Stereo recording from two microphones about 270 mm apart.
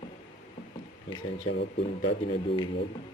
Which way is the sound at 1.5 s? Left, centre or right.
Left.